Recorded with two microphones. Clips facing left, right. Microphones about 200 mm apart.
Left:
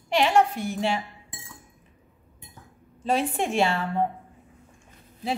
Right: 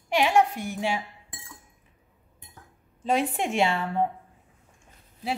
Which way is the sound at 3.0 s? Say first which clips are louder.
Even; 15° right (ahead or behind).